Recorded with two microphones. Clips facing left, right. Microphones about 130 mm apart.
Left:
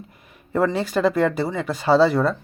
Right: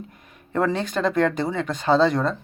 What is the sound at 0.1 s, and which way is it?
A man's voice, 5° left (ahead or behind).